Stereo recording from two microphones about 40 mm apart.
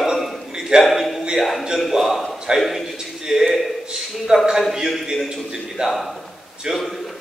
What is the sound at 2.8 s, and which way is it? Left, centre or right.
A man's voice, centre.